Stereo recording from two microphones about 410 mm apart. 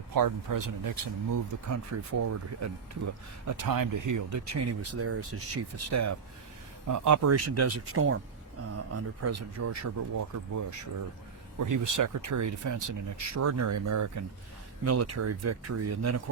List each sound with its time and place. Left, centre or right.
0.1 s speech: right
3.4 s speech: right
11.6 s speech: right